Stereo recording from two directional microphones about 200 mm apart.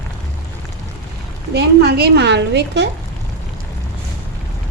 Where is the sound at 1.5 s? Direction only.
55° right (ahead or behind).